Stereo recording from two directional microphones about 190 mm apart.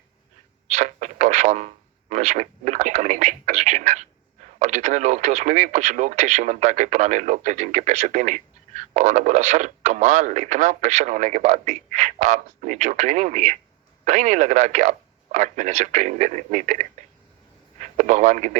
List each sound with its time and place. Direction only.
0.7 s speech: 40° right (ahead or behind)